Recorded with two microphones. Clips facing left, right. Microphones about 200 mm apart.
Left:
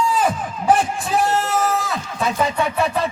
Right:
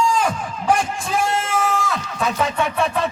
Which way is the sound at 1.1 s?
40° left (ahead or behind).